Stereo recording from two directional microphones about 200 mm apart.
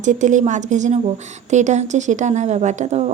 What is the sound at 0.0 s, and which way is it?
Speech, 40° right (ahead or behind).